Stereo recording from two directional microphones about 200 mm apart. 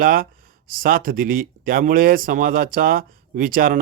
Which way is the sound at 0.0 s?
45° right (ahead or behind).